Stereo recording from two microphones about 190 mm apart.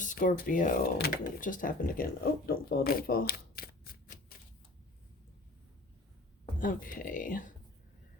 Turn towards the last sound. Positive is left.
turn(degrees=45)  # may be behind; listen again after turning